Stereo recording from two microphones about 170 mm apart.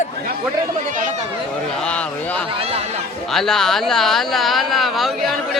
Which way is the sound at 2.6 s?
35° right (ahead or behind).